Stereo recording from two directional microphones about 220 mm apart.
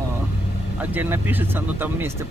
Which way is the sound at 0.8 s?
10° right (ahead or behind).